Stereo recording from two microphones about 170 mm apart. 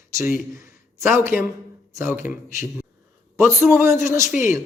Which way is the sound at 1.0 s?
15° right (ahead or behind).